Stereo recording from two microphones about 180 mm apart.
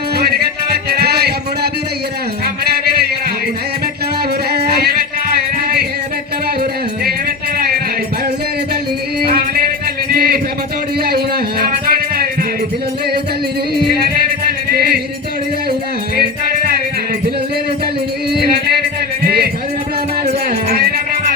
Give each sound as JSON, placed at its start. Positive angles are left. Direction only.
{"t": 0.2, "sound": "music", "side_deg": -60}
{"t": 4.5, "sound": "music", "side_deg": -65}
{"t": 10.1, "sound": "music", "side_deg": -55}
{"t": 11.6, "sound": "music", "side_deg": -55}
{"t": 14.7, "sound": "music", "side_deg": -60}
{"t": 18.3, "sound": "music", "side_deg": -60}
{"t": 20.5, "sound": "music", "side_deg": -55}